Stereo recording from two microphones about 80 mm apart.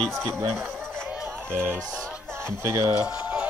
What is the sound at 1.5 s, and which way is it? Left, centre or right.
Speech, right.